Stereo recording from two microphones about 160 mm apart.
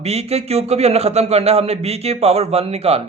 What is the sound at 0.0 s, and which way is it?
A man's voice, 40° right (ahead or behind).